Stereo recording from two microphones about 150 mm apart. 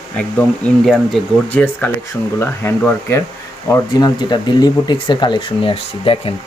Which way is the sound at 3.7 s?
25° left (ahead or behind).